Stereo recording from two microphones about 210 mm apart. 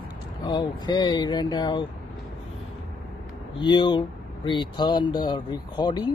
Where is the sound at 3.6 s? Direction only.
20° left (ahead or behind).